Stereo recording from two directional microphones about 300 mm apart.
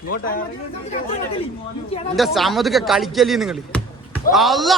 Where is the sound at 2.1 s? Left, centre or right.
Centre.